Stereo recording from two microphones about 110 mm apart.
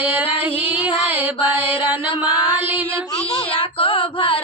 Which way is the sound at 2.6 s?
15° right (ahead or behind).